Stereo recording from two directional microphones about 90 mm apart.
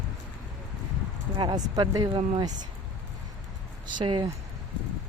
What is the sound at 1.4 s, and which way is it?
Speech, 55° right (ahead or behind).